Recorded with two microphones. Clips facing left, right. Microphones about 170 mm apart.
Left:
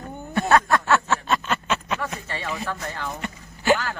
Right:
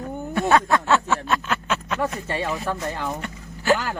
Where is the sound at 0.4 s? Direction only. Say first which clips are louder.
Even; 20° right (ahead or behind).